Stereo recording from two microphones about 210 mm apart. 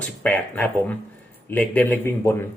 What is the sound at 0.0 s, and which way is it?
Speech, 5° left (ahead or behind).